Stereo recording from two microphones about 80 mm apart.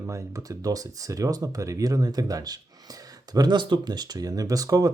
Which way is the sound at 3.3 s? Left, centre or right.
Right.